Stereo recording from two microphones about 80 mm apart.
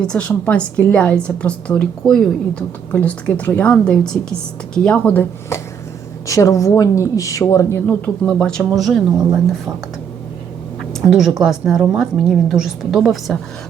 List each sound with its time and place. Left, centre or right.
0.0 s a woman's voice: centre
2.0 s a woman's voice: centre
2.6 s a woman's voice: centre
6.2 s speech: left
7.9 s a woman's voice: centre
11.0 s a woman's voice: centre